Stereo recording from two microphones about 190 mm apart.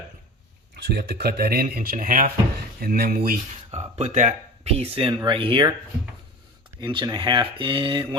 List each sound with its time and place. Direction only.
0.9 s speech: 60° right (ahead or behind)
3.2 s speech: 35° right (ahead or behind)
6.7 s speech: 25° right (ahead or behind)